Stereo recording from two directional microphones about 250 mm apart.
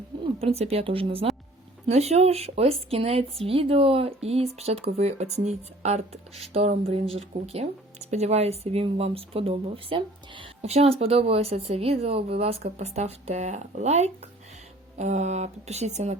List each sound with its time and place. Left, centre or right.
0.3 s speech: right